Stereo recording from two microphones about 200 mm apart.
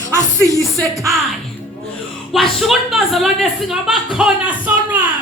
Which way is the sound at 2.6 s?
Centre (ahead or behind).